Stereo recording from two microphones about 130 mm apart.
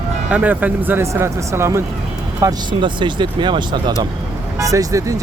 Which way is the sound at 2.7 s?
40° right (ahead or behind).